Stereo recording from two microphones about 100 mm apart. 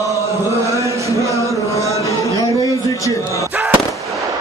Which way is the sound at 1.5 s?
30° left (ahead or behind).